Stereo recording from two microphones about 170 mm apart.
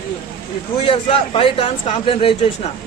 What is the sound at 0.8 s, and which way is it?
A man's voice, 35° left (ahead or behind).